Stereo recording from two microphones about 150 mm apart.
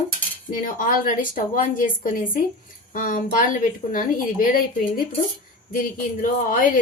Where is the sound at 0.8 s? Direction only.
60° left (ahead or behind).